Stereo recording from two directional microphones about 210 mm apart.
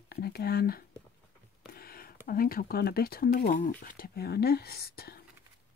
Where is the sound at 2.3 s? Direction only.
45° left (ahead or behind).